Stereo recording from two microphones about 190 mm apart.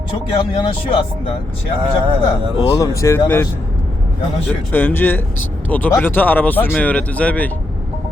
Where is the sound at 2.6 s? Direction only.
20° left (ahead or behind).